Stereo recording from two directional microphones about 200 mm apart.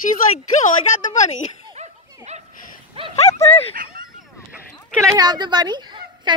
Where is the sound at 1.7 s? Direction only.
35° right (ahead or behind).